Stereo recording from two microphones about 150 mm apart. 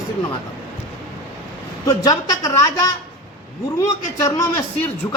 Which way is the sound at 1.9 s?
25° left (ahead or behind).